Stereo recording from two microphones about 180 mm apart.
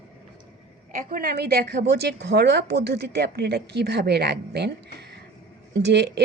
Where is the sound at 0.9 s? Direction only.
55° right (ahead or behind).